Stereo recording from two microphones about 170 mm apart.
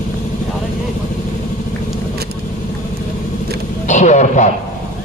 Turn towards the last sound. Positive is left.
turn(degrees=45)  # may be behind; listen again after turning